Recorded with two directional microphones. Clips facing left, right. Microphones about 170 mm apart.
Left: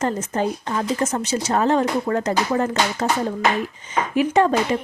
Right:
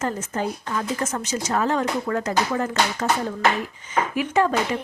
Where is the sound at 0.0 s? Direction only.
35° left (ahead or behind).